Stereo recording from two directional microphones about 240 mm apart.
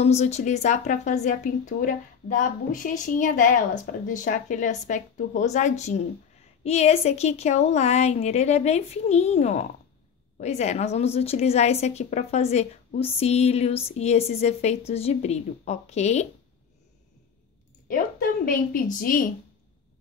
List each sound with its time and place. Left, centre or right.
0.0 s a woman's voice: left
17.8 s speech: left